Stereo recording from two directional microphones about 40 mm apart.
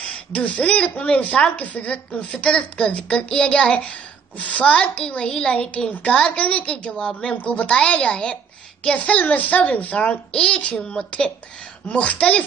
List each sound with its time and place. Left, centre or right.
0.3 s a woman's voice: left; by 5.5 s centre
5.5 s a woman's voice: left
10.3 s a woman's voice: left